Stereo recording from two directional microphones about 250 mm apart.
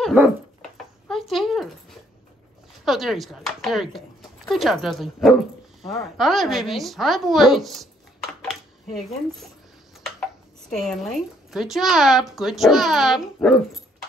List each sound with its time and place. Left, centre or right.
0.0 s dog: centre
2.8 s speech: centre
8.4 s a sound: centre
10.7 s speech: centre